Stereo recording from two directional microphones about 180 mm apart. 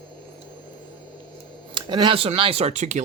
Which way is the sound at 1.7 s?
25° right (ahead or behind).